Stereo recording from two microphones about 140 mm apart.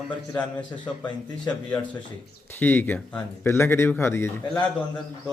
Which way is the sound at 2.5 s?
15° left (ahead or behind).